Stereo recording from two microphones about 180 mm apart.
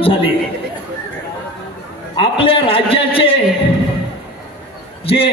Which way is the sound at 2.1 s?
30° left (ahead or behind).